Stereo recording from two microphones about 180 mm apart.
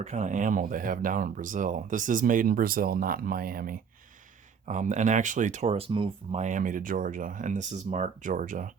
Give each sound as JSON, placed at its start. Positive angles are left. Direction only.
{"t": 0.0, "sound": "speech", "side_deg": -40}
{"t": 4.6, "sound": "speech", "side_deg": -45}
{"t": 6.4, "sound": "speech", "side_deg": -45}